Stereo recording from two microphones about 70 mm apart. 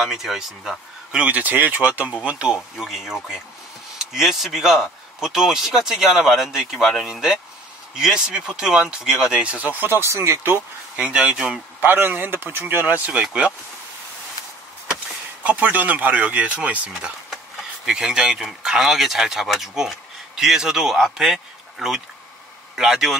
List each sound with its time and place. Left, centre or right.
0.0 s speech: centre
1.2 s speech: right
11.0 s speech: centre
11.8 s speech: right
15.4 s speech: right; by 23.1 s centre